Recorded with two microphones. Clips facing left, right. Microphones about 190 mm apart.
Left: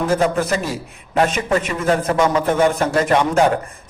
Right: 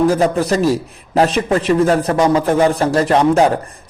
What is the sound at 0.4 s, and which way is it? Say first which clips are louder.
A man's voice: right 7 dB; 35° right (ahead or behind).